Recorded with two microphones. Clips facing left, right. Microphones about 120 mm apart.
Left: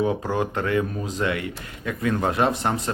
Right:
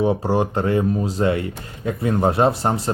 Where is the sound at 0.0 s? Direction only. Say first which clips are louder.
Right 4 dB; 30° right (ahead or behind).